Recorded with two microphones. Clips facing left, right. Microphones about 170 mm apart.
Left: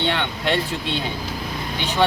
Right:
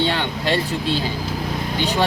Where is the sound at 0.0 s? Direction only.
35° right (ahead or behind).